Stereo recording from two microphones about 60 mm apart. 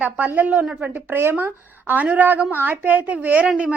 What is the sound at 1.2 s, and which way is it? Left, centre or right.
Speech, right.